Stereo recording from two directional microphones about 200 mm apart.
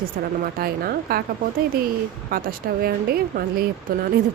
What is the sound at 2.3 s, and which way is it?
Speech, 45° right (ahead or behind).